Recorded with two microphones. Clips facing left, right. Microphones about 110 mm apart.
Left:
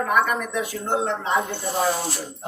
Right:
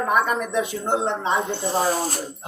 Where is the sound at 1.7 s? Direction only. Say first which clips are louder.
Right 1 dB; 40° right (ahead or behind).